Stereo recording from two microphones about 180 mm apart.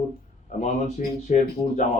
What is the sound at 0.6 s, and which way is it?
Speech, 40° left (ahead or behind).